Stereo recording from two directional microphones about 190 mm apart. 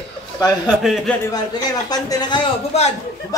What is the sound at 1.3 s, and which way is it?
A man's voice, 20° left (ahead or behind).